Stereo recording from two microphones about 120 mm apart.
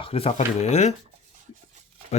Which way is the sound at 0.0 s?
55° left (ahead or behind).